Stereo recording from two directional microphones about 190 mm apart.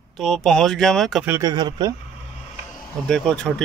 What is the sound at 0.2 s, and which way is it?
Speech, centre (ahead or behind).